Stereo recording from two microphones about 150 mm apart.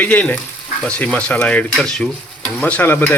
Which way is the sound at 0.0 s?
10° left (ahead or behind).